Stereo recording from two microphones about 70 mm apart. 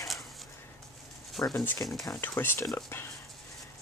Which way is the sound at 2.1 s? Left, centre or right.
Left.